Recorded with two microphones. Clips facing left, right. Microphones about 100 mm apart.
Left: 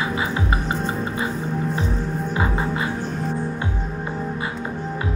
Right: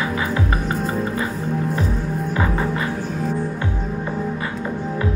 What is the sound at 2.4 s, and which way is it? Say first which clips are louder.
Music: right 1 dB; 20° left (ahead or behind).